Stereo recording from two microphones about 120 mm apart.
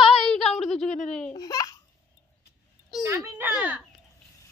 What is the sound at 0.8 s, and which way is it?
Speech, 80° left.